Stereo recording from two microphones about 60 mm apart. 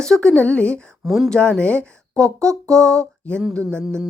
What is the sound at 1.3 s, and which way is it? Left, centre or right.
A woman's voice, centre.